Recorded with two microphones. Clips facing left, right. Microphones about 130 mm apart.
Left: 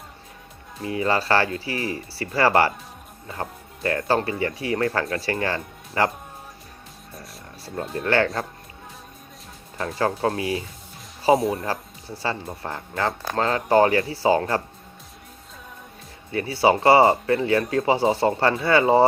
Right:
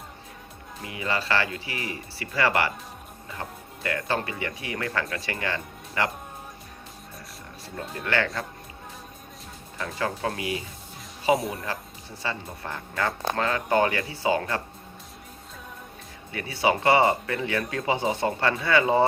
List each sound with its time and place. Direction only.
0.9 s speech: 35° left (ahead or behind)
3.8 s speech: 35° left (ahead or behind)
7.9 s speech: 35° left (ahead or behind)
9.7 s speech: 35° left (ahead or behind)
16.3 s speech: 30° left (ahead or behind)